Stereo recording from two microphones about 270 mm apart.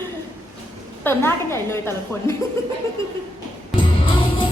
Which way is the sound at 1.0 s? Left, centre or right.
Centre.